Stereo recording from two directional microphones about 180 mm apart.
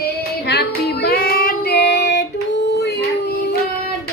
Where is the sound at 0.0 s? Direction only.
65° left (ahead or behind).